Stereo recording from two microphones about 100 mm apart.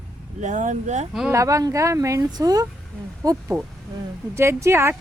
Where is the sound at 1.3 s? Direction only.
30° right (ahead or behind).